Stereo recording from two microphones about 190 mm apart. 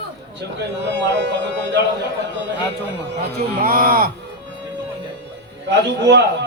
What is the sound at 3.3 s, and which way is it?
Speech, 55° right (ahead or behind).